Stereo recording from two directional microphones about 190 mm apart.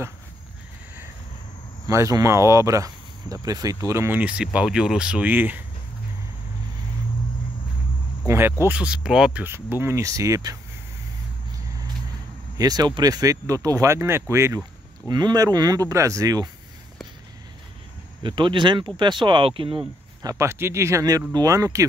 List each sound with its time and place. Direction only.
1.9 s speech: 15° right (ahead or behind)
8.3 s speech: 15° right (ahead or behind)
12.5 s speech: 20° right (ahead or behind)
18.2 s speech: 25° right (ahead or behind)
20.2 s speech: 15° right (ahead or behind)